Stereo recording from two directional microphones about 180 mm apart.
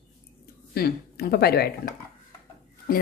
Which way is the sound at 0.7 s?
60° left (ahead or behind).